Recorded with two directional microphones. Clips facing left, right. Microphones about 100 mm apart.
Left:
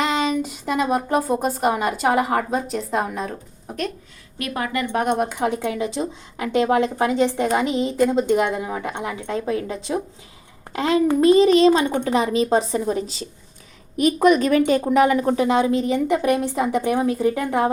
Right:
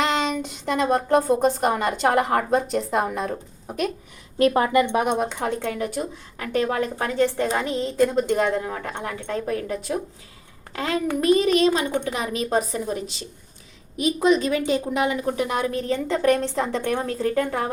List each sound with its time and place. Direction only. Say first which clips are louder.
0.0 s a woman's voice: left 2 dB; 5° left (ahead or behind)
4.4 s speech: right 7 dB; 30° right (ahead or behind)
5.1 s a woman's voice: left 2 dB; 5° left (ahead or behind); by 13.2 s 35° left (ahead or behind)
13.9 s a woman's voice: left 4 dB; 55° left (ahead or behind)
15.4 s speech: left 6 dB; 25° left (ahead or behind)